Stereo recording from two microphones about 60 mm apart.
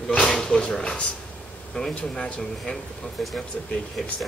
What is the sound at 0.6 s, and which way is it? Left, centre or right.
Speech, centre.